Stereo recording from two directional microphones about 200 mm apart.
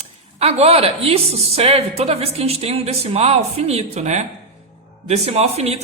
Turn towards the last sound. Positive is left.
turn(degrees=-30)  # may be behind; listen again after turning